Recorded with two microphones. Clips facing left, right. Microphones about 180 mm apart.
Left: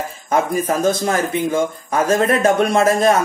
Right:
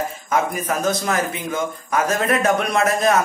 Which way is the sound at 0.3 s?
30° left (ahead or behind).